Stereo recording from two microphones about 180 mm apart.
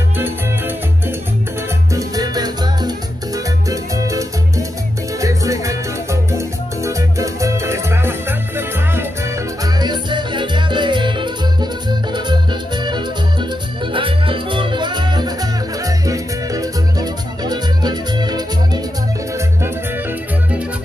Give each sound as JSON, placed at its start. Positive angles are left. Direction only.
{"t": 2.0, "sound": "music", "side_deg": -20}
{"t": 3.9, "sound": "music", "side_deg": -20}
{"t": 6.3, "sound": "salsa music", "side_deg": -15}
{"t": 9.8, "sound": "music", "side_deg": -25}
{"t": 12.8, "sound": "music", "side_deg": -25}